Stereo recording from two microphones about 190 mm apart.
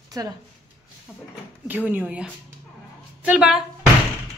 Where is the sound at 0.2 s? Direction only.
20° right (ahead or behind).